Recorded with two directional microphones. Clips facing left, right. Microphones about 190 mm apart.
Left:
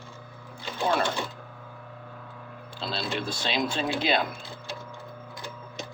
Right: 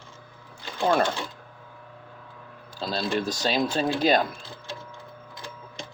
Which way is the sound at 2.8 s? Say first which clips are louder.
Right 4 dB; 40° right (ahead or behind).